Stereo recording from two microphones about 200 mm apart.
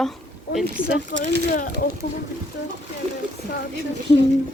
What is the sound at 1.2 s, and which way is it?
Speech, 55° right (ahead or behind).